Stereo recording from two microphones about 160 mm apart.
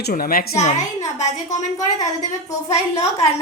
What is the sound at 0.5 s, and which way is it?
Speech, 45° left (ahead or behind).